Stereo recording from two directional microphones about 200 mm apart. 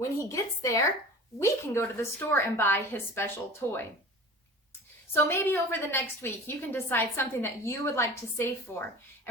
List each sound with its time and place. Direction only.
0.2 s a woman's voice: 15° left (ahead or behind)
5.1 s a woman's voice: 10° left (ahead or behind)